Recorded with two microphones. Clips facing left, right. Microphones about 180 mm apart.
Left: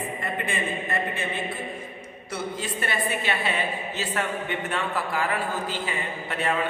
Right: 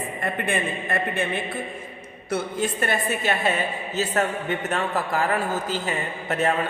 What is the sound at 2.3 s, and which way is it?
A man's voice, 50° right (ahead or behind).